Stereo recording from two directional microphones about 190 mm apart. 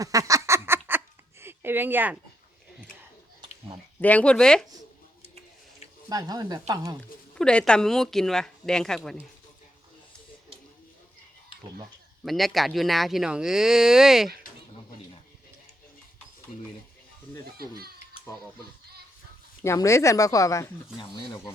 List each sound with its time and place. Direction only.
0.0 s a sound: 20° right (ahead or behind)
4.0 s speech: 5° left (ahead or behind)
6.1 s speech: 20° right (ahead or behind)
7.3 s speech: 5° left (ahead or behind)
12.2 s speech: centre (ahead or behind)
17.6 s speech: 55° right (ahead or behind)
19.6 s speech: 15° left (ahead or behind)